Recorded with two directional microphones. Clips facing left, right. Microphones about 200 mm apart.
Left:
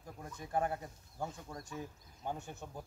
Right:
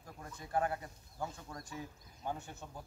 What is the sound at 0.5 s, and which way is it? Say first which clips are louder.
Speech: even; 20° left (ahead or behind).